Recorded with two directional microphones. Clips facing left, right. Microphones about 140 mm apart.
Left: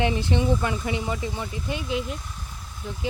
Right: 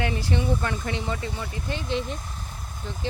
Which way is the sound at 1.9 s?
5° left (ahead or behind).